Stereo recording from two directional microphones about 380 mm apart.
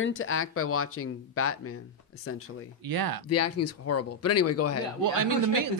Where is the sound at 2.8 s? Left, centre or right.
Right.